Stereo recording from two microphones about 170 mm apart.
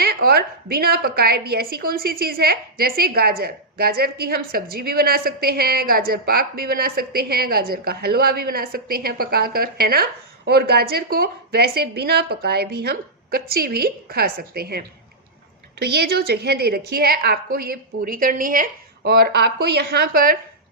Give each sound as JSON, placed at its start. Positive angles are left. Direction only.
{"t": 0.0, "sound": "a woman's voice", "side_deg": -65}